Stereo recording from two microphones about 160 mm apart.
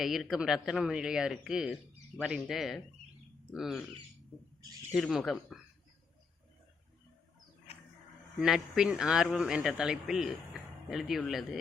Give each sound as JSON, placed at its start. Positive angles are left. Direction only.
{"t": 0.0, "sound": "speech", "side_deg": 0}
{"t": 4.9, "sound": "speech", "side_deg": 0}
{"t": 8.4, "sound": "speech", "side_deg": -5}